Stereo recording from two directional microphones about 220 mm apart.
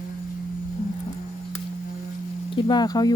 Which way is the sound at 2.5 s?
20° left (ahead or behind).